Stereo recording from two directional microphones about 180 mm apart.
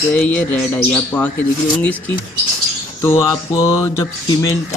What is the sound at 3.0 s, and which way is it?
A man's voice, 15° left (ahead or behind).